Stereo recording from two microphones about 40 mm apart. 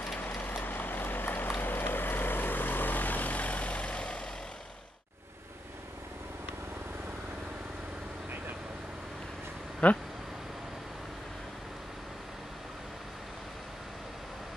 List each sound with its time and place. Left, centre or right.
0.4 s vehicle: left
9.8 s speech: left